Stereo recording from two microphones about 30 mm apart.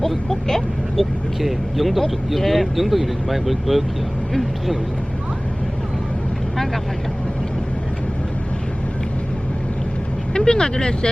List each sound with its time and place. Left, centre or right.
0.3 s vehicle: centre
0.9 s speech: centre
10.3 s speech: left